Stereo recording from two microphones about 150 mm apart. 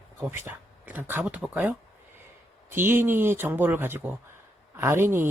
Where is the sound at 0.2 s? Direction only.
15° right (ahead or behind).